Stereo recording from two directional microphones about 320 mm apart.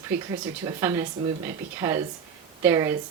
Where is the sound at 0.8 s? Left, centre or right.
Centre.